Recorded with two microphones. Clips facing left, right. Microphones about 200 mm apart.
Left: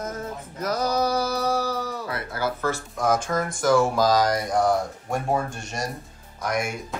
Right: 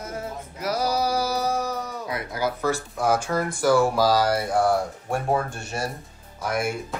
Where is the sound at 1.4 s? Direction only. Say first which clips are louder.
Left 1 dB; 30° left (ahead or behind).